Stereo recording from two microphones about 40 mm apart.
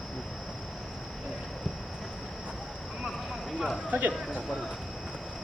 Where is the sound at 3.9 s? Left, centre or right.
Right.